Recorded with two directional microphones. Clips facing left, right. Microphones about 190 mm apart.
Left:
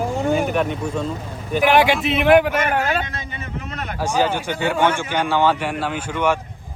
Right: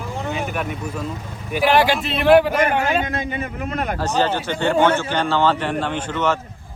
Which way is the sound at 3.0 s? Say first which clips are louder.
Right 7 dB; 45° right (ahead or behind).